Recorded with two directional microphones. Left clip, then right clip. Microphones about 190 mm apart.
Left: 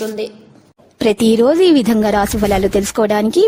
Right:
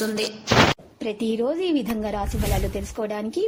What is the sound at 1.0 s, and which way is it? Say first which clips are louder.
A woman's voice: left 14 dB; 75° left (ahead or behind).